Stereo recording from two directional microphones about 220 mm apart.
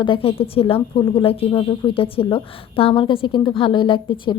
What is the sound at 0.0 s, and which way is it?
A woman's voice, 25° left (ahead or behind).